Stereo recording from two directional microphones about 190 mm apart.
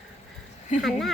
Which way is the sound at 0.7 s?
40° left (ahead or behind).